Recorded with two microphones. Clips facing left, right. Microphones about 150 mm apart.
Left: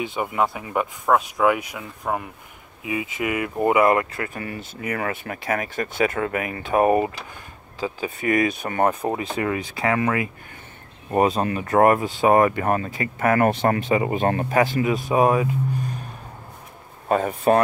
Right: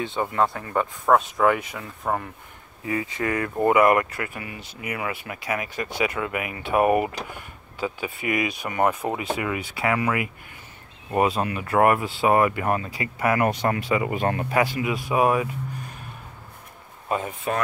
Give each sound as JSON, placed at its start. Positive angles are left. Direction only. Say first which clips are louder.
{"t": 0.0, "sound": "speech", "louder": "even", "side_deg": 15}
{"t": 13.8, "sound": "speech", "louder": "left 3 dB", "side_deg": 25}
{"t": 15.1, "sound": "speech", "louder": "left 2 dB", "side_deg": 30}
{"t": 17.1, "sound": "speech", "louder": "left 8 dB", "side_deg": 50}